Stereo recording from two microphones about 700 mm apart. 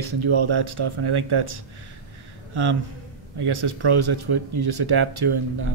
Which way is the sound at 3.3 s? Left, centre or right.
Right.